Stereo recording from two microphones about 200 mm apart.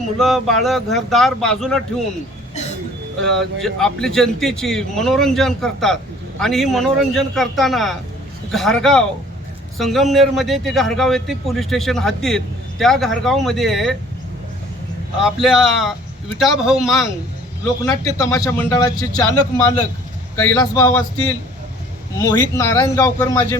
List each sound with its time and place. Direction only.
0.2 s a man's voice: centre (ahead or behind)
3.2 s a man's voice: centre (ahead or behind)
15.2 s a man's voice: centre (ahead or behind)
17.8 s a man's voice: 15° left (ahead or behind)
22.2 s a man's voice: 15° left (ahead or behind)